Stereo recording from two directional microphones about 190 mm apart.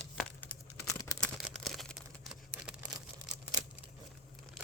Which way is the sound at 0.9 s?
20° left (ahead or behind).